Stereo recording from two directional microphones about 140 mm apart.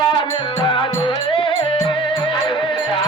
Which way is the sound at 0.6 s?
40° left (ahead or behind).